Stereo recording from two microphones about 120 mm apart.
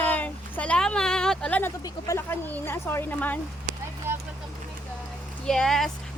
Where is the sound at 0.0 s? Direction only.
15° left (ahead or behind).